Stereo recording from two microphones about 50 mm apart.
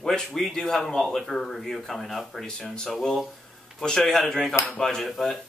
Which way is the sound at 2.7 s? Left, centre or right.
Centre.